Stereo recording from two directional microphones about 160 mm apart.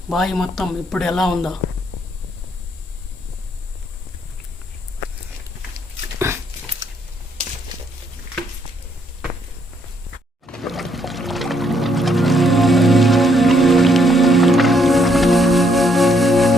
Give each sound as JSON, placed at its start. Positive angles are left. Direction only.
{"t": 0.1, "sound": "speech", "side_deg": 0}
{"t": 6.1, "sound": "dog", "side_deg": -15}
{"t": 10.4, "sound": "music", "side_deg": 5}